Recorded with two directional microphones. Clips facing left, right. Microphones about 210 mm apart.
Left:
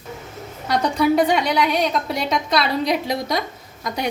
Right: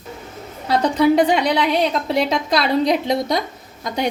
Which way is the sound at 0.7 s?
25° right (ahead or behind).